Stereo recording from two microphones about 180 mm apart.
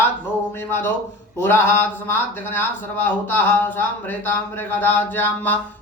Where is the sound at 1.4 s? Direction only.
10° left (ahead or behind).